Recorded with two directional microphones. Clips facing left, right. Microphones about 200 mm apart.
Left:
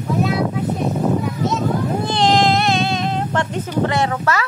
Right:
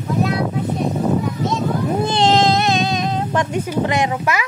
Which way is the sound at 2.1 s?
20° right (ahead or behind).